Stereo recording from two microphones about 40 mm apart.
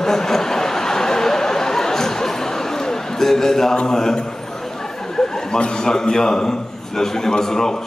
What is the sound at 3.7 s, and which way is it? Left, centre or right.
Speech, centre.